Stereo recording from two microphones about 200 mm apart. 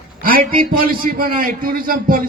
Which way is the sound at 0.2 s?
45° right (ahead or behind).